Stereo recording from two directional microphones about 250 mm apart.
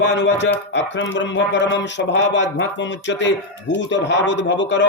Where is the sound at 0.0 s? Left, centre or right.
Left.